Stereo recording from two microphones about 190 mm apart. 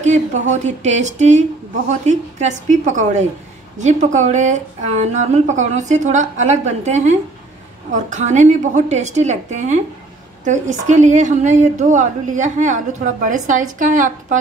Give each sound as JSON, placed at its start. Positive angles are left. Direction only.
{"t": 0.0, "sound": "a woman's voice", "side_deg": -40}